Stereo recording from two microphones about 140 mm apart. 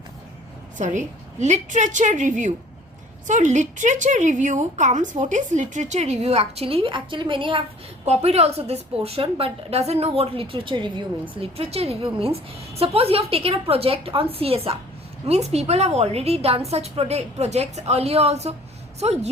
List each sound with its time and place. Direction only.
0.8 s a woman's voice: 60° right (ahead or behind); by 7.6 s 35° right (ahead or behind)
8.0 s a woman's voice: 50° right (ahead or behind)